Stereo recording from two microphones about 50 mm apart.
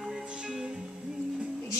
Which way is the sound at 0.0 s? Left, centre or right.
Centre.